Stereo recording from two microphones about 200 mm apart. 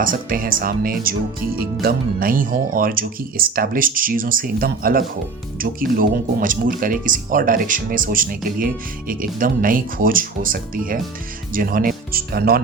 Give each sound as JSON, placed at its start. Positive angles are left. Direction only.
{"t": 0.0, "sound": "speech", "side_deg": -45}